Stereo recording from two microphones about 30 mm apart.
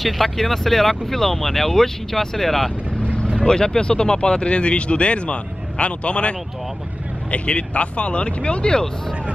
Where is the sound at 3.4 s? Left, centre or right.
Left.